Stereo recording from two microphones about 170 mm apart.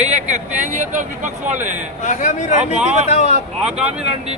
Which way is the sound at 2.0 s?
50° left (ahead or behind).